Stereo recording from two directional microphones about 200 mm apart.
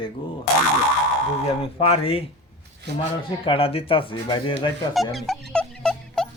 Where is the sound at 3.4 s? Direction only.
25° left (ahead or behind).